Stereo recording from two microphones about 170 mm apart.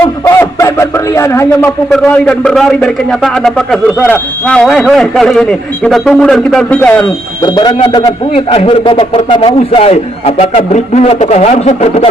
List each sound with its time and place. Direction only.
0.0 s a sound: 15° left (ahead or behind)
1.9 s a man's voice: 5° left (ahead or behind)
7.4 s speech: 25° left (ahead or behind)
8.3 s a man's voice: 35° left (ahead or behind)